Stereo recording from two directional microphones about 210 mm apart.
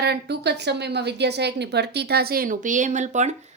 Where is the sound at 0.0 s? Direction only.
50° right (ahead or behind).